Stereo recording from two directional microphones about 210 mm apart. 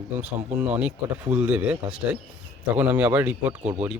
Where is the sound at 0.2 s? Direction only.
5° right (ahead or behind).